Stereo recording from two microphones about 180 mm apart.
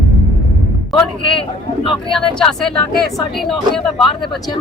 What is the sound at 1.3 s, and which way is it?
Speech, 30° left (ahead or behind).